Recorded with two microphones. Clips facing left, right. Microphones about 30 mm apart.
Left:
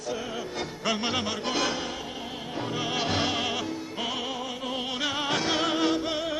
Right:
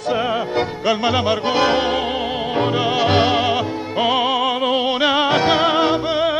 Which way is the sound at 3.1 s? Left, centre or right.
Right.